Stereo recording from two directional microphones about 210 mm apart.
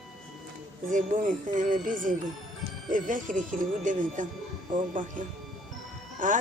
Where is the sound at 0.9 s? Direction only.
40° right (ahead or behind).